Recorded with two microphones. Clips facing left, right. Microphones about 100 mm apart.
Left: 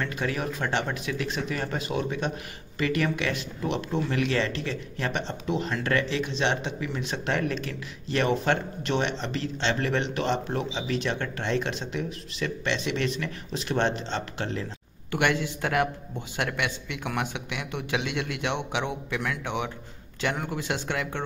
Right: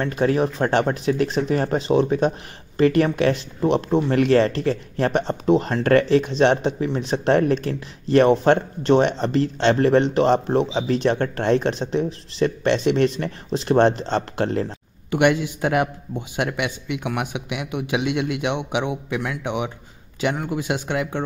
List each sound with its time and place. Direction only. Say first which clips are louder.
0.0 s speech: right 10 dB; 40° right (ahead or behind)
15.0 s a man's voice: right 7 dB; 20° right (ahead or behind)